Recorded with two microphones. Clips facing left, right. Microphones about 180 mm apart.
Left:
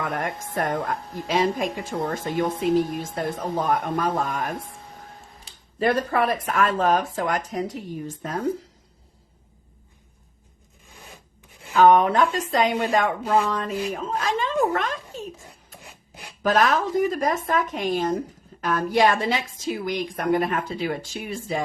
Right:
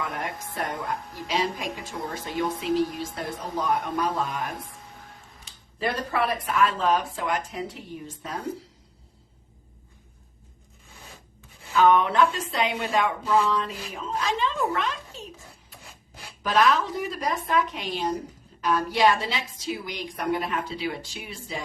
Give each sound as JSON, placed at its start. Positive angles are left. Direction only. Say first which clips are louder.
{"t": 0.0, "sound": "a sound", "louder": "left 4 dB", "side_deg": 50}
{"t": 0.5, "sound": "a woman's voice", "louder": "left 6 dB", "side_deg": 50}
{"t": 5.8, "sound": "a woman's voice", "louder": "left 5 dB", "side_deg": 50}
{"t": 10.9, "sound": "rub", "louder": "left 2 dB", "side_deg": 15}
{"t": 11.7, "sound": "a woman's voice", "louder": "left 4 dB", "side_deg": 40}
{"t": 16.4, "sound": "a woman's voice", "louder": "left 2 dB", "side_deg": 45}